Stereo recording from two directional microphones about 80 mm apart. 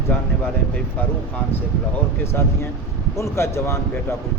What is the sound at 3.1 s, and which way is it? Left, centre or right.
Speech, left.